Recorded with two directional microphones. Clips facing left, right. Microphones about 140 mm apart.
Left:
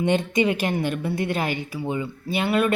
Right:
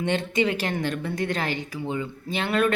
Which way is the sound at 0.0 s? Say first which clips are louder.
Left 3 dB; 15° left (ahead or behind).